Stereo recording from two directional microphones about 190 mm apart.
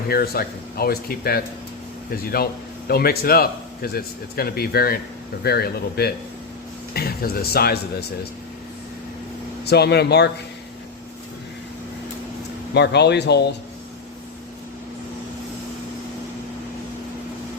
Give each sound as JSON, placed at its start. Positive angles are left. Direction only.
{"t": 0.1, "sound": "speech", "side_deg": 55}
{"t": 9.6, "sound": "speech", "side_deg": 60}
{"t": 12.7, "sound": "speech", "side_deg": 60}